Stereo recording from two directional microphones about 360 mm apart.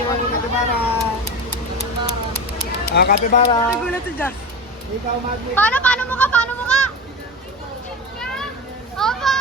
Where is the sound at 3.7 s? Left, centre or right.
Centre.